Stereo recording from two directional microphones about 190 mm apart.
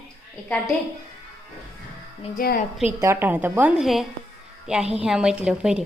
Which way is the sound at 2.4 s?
50° left (ahead or behind).